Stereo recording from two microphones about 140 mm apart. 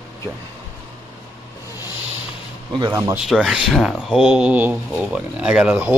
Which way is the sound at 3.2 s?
5° right (ahead or behind).